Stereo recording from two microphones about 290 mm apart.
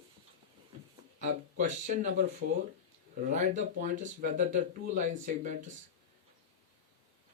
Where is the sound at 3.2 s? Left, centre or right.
Right.